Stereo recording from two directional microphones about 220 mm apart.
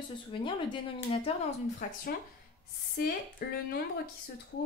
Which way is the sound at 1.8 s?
35° left (ahead or behind).